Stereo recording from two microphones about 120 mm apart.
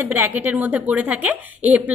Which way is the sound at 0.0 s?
15° right (ahead or behind).